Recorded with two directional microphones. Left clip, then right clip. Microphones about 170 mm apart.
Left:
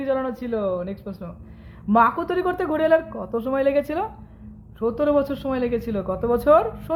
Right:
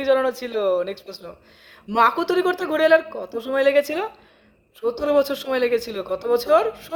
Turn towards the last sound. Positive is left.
turn(degrees=-20)  # may be behind; listen again after turning